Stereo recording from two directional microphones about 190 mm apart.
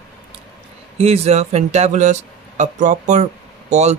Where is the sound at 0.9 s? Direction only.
35° right (ahead or behind).